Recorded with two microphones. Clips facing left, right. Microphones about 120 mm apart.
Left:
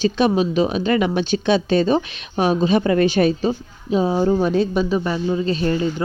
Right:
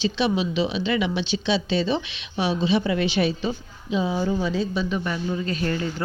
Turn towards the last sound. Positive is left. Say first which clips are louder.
# left 6 dB
turn(degrees=25)  # may be behind; listen again after turning